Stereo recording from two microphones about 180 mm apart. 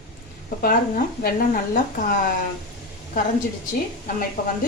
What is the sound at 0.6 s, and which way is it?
Speech, 55° left (ahead or behind).